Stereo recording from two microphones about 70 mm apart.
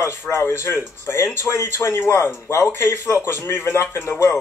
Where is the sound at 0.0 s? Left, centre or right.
Left.